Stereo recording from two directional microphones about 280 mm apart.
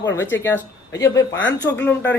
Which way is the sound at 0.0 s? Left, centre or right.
Centre.